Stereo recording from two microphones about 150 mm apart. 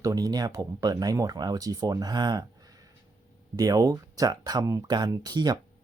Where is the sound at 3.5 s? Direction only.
25° right (ahead or behind).